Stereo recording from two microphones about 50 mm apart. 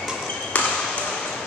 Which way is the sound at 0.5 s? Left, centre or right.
Left.